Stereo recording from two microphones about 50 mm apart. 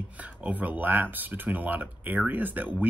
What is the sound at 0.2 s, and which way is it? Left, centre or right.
Speech, right.